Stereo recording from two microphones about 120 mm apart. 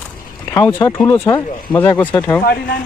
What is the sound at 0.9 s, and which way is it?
Speech, 20° left (ahead or behind).